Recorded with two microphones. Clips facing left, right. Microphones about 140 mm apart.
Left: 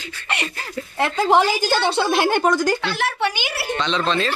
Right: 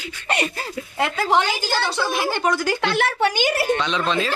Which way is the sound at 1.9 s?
65° left (ahead or behind).